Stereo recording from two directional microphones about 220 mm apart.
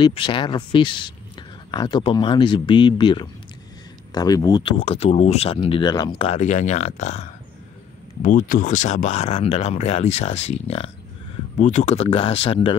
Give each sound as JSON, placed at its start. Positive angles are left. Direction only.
{"t": 0.0, "sound": "speech", "side_deg": 20}